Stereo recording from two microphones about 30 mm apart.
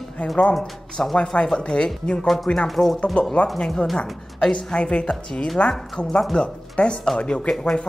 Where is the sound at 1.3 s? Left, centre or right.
Left.